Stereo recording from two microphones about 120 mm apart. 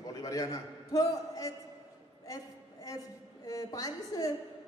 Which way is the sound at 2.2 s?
30° left (ahead or behind).